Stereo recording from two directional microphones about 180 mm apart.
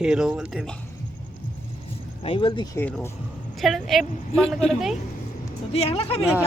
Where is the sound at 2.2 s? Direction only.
30° left (ahead or behind).